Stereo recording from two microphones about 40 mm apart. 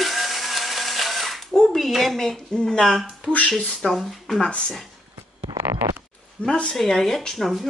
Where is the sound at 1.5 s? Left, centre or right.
Centre.